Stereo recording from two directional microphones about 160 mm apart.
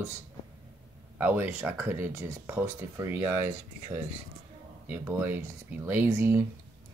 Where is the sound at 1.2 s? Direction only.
10° right (ahead or behind).